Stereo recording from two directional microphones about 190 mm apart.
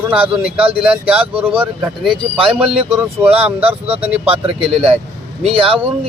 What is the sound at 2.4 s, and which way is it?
Speech, 30° right (ahead or behind).